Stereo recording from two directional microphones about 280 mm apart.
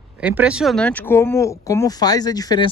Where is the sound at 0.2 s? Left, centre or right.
Centre.